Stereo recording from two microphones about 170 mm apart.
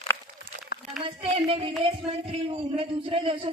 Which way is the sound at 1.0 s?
35° right (ahead or behind).